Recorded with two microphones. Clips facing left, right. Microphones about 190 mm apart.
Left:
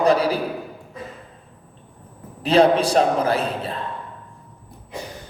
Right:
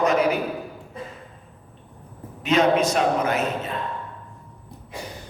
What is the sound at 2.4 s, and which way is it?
Music, 35° left (ahead or behind).